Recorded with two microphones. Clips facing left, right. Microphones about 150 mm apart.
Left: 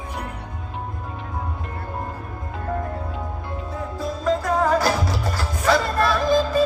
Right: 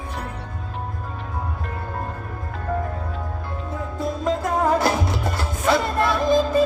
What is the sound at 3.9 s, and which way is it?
Music, 25° right (ahead or behind).